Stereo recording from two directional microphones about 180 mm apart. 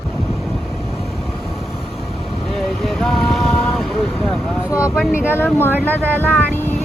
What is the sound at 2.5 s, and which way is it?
Vehicle, centre (ahead or behind).